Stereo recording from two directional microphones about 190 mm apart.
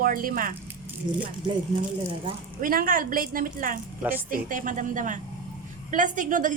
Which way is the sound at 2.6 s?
50° right (ahead or behind).